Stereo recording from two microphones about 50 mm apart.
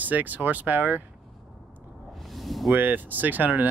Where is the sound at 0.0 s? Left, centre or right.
Right.